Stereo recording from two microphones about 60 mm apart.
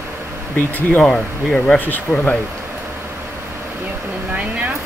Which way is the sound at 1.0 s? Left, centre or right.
Centre.